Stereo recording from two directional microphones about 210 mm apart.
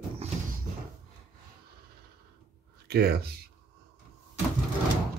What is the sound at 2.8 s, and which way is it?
Speech, 50° right (ahead or behind).